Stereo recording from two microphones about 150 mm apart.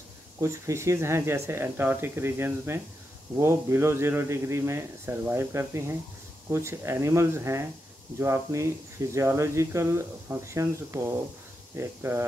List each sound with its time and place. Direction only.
0.4 s speech: 20° right (ahead or behind)